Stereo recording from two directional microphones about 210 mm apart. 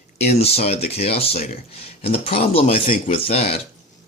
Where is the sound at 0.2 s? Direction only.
30° left (ahead or behind).